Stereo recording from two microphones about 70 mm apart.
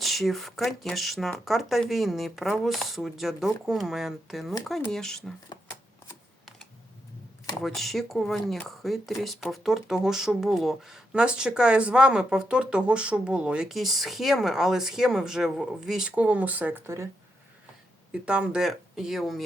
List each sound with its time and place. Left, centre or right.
0.0 s speech: centre
7.6 s speech: centre
16.1 s speech: right
16.8 s speech: right
18.1 s speech: centre
18.6 s speech: centre